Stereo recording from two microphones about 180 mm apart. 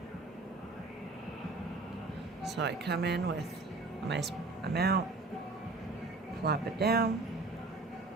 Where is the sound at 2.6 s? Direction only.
65° right (ahead or behind).